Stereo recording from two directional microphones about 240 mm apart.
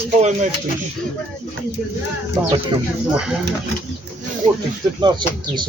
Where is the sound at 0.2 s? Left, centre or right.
Right.